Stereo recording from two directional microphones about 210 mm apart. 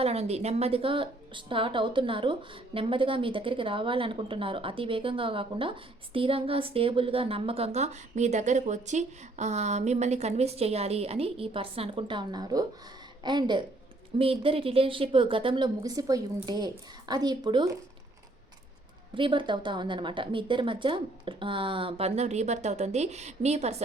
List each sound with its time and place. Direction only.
0.0 s a woman's voice: 30° right (ahead or behind)
19.1 s a woman's voice: 25° right (ahead or behind)